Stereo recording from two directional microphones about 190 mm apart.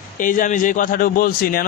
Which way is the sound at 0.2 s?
45° left (ahead or behind).